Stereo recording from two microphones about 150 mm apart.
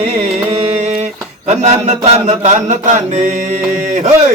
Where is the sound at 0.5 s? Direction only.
45° right (ahead or behind).